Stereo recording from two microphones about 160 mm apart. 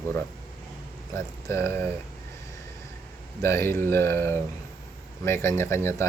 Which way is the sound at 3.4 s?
15° left (ahead or behind).